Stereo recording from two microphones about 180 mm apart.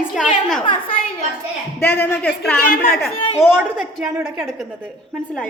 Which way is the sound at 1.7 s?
10° left (ahead or behind).